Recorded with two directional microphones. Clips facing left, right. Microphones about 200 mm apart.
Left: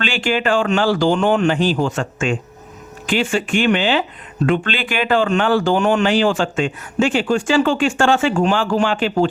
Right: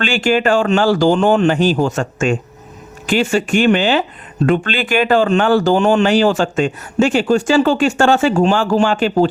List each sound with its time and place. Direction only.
0.0 s speech: 45° right (ahead or behind)